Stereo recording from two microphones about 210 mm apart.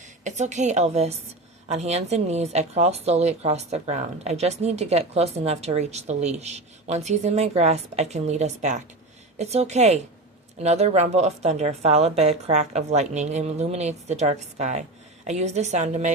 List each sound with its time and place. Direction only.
0.3 s speech: 35° right (ahead or behind)